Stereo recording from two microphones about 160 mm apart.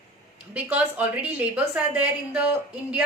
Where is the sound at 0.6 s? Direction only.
10° right (ahead or behind).